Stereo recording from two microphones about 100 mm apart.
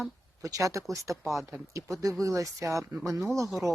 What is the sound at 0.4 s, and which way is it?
Speech, 35° right (ahead or behind).